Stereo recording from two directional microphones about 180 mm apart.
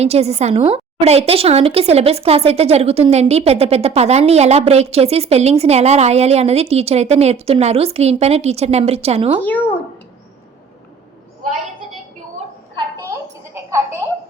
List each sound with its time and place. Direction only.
0.0 s a woman's voice: 35° right (ahead or behind)
9.4 s speech: 10° left (ahead or behind)
12.7 s a sound: 15° right (ahead or behind)